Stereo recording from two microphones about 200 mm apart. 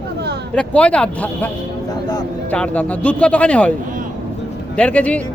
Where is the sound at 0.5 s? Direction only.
5° left (ahead or behind).